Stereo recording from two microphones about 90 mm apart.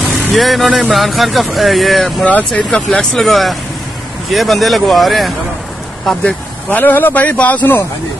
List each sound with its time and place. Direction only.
0.0 s speech: 5° right (ahead or behind)
2.2 s speech: 15° left (ahead or behind)
6.7 s speech: 20° left (ahead or behind)